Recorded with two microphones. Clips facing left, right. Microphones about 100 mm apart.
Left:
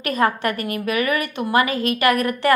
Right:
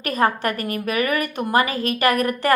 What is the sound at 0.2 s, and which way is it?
A woman's voice, 35° right (ahead or behind).